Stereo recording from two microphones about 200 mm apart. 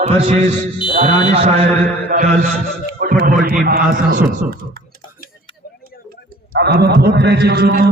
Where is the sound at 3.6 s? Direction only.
50° right (ahead or behind).